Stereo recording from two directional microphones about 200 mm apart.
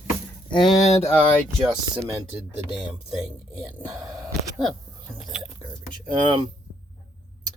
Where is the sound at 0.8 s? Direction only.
35° left (ahead or behind).